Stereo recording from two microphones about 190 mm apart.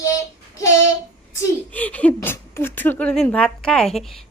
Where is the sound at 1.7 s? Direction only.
10° left (ahead or behind).